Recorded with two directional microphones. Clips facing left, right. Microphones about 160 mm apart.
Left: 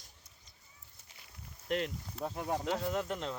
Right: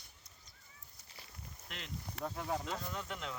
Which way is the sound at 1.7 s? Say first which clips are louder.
Left 17 dB; 55° left (ahead or behind).